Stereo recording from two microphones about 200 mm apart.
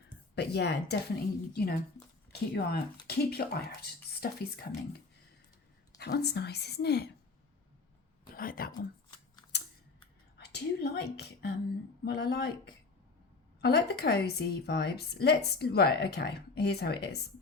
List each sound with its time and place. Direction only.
0.3 s a woman's voice: 55° left (ahead or behind)
6.0 s speech: 55° left (ahead or behind)
8.4 s a woman's voice: 45° left (ahead or behind)
9.5 s scissors: 55° left (ahead or behind)
10.3 s a woman's voice: 55° left (ahead or behind)
13.6 s a woman's voice: 55° left (ahead or behind)